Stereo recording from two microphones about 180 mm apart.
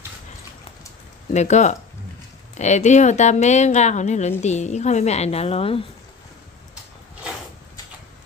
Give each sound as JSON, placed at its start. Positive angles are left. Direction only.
{"t": 1.3, "sound": "a woman's voice", "side_deg": 40}